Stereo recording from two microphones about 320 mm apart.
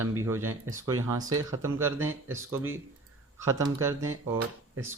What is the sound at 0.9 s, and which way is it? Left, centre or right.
Speech, right.